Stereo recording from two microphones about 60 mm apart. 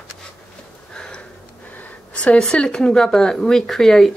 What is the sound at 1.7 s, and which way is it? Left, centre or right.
A woman's voice, left.